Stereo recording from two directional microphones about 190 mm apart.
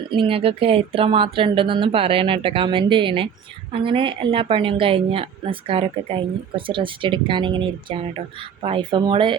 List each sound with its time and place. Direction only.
0.2 s speech: 30° right (ahead or behind)